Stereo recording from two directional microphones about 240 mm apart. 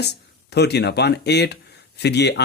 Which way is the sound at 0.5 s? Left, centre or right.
Left.